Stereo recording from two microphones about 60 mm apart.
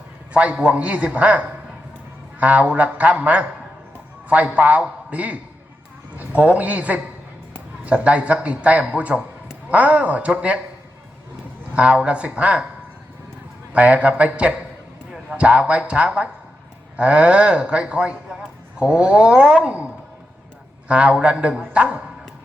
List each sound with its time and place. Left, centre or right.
0.5 s a man's voice: centre
11.7 s a man's voice: centre
13.7 s a man's voice: right